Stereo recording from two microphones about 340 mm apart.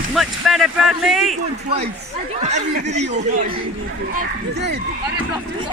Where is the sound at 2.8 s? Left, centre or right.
Centre.